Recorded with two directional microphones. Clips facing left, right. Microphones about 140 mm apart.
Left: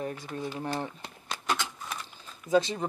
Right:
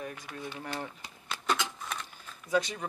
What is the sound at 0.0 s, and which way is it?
Speech, 35° left (ahead or behind).